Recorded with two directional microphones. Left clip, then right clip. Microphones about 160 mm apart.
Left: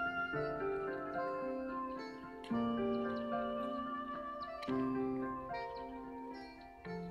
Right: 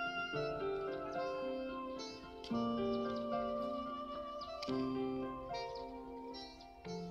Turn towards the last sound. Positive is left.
turn(degrees=20)  # may be behind; listen again after turning